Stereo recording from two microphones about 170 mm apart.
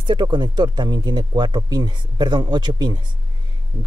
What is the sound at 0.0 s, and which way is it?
Speech, 25° right (ahead or behind).